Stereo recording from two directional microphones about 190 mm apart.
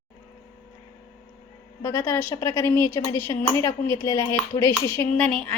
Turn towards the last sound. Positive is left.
turn(degrees=5)  # may be behind; listen again after turning